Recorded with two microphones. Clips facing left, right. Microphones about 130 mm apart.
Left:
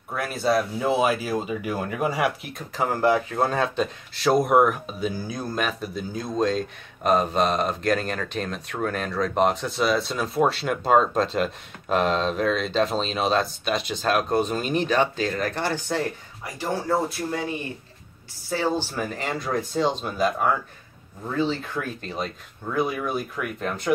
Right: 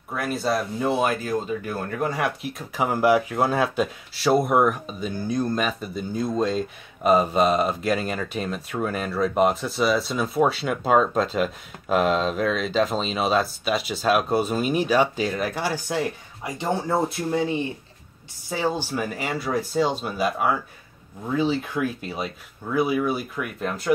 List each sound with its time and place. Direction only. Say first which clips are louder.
0.1 s speech: left 1 dB; centre (ahead or behind)
2.7 s speech: right 2 dB; 10° right (ahead or behind)
18.5 s speech: even; 15° right (ahead or behind)